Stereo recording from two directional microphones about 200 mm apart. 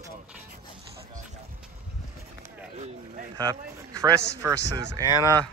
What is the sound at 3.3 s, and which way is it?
Speech, 20° right (ahead or behind).